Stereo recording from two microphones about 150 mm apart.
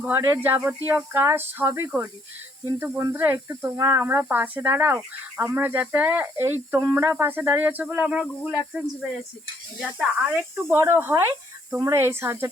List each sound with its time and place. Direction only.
0.0 s speech: 15° right (ahead or behind)
10.5 s speech: 15° right (ahead or behind)